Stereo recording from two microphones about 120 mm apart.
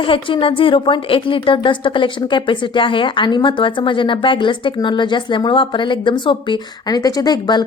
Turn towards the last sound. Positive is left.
turn(degrees=35)  # may be behind; listen again after turning